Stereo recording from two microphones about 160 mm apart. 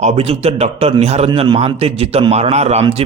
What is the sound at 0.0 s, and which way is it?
Speech, 40° right (ahead or behind).